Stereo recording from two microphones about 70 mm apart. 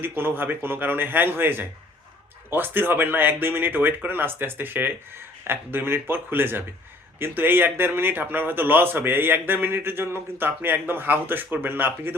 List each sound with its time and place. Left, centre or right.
0.0 s speech: right